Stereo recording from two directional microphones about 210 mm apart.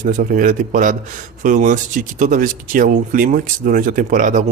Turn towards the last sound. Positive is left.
turn(degrees=-40)  # may be behind; listen again after turning